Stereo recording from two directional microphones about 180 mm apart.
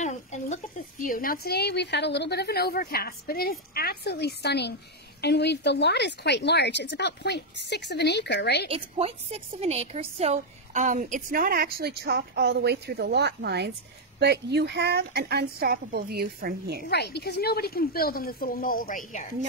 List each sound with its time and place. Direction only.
0.0 s a sound: 40° left (ahead or behind)
1.0 s a woman's voice: 50° left (ahead or behind); by 8.6 s 65° left (ahead or behind)
8.6 s a woman's voice: 30° right (ahead or behind); by 16.8 s 60° right (ahead or behind)
16.9 s a woman's voice: 65° left (ahead or behind); by 19.2 s 50° left (ahead or behind)